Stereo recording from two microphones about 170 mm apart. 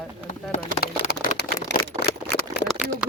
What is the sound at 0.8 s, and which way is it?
Vehicle, 65° left (ahead or behind).